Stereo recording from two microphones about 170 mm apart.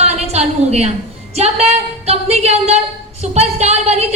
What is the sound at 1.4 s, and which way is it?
A woman's voice, 40° right (ahead or behind).